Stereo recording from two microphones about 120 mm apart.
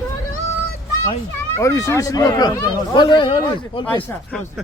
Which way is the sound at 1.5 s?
25° left (ahead or behind).